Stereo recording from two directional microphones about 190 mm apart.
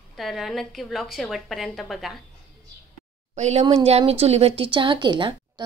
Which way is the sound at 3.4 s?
35° right (ahead or behind).